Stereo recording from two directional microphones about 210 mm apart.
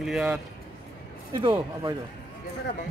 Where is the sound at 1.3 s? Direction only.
20° right (ahead or behind).